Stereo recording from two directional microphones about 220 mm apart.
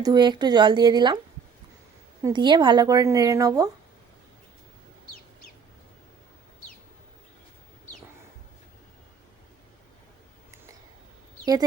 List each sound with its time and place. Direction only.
0.0 s a woman's voice: 20° right (ahead or behind)
2.2 s a woman's voice: 20° right (ahead or behind)